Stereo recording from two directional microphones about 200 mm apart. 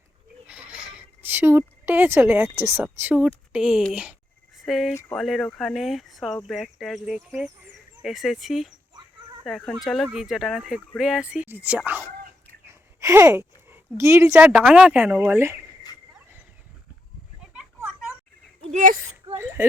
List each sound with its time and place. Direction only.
0.4 s speech: 5° right (ahead or behind)
4.9 s speech: 10° left (ahead or behind)
5.2 s a woman's voice: centre (ahead or behind)
17.5 s a sound: 5° right (ahead or behind)
18.7 s speech: 40° right (ahead or behind)
19.6 s speech: 15° right (ahead or behind)